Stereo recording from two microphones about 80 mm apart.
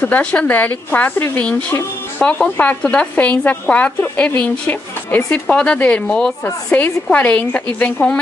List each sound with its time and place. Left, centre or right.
0.0 s a woman's voice: centre